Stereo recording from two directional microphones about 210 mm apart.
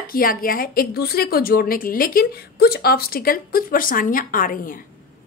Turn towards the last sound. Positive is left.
turn(degrees=40)  # may be behind; listen again after turning